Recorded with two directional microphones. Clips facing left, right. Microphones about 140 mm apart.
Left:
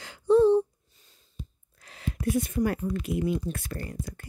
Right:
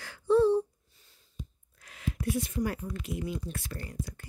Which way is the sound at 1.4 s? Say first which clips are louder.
Left 1 dB; 35° left (ahead or behind).